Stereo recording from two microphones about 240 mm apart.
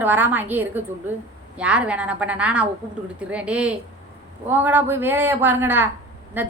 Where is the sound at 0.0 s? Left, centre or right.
Centre.